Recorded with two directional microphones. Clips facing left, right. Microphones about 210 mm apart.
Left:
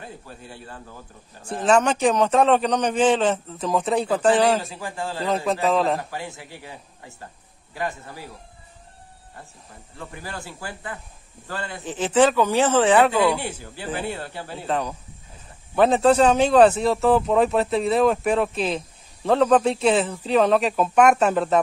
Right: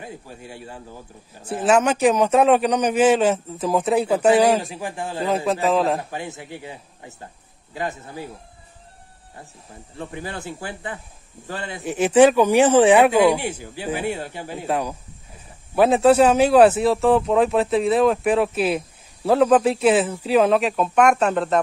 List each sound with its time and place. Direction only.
0.0 s speech: 15° right (ahead or behind)
5.2 s speech: 5° right (ahead or behind)
5.9 s speech: 20° right (ahead or behind)
9.9 s speech: 20° right (ahead or behind); by 21.5 s centre (ahead or behind)